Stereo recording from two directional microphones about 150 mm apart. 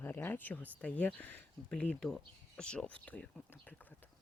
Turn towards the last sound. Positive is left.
turn(degrees=10)  # may be behind; listen again after turning